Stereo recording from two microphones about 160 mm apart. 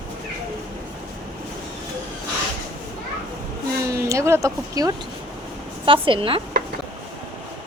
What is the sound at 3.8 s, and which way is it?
Speech, 20° right (ahead or behind).